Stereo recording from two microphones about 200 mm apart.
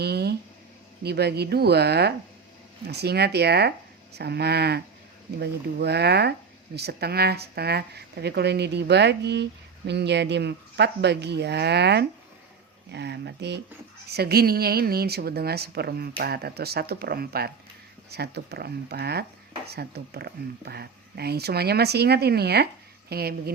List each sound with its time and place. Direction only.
0.0 s speech: 55° right (ahead or behind)